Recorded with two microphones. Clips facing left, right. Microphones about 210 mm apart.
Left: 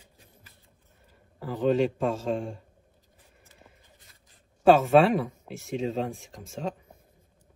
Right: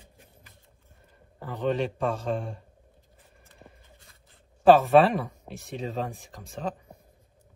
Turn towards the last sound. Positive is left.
turn(degrees=0)  # may be behind; listen again after turning